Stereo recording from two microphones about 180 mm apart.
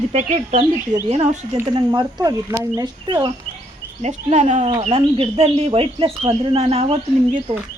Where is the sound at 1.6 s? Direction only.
25° right (ahead or behind).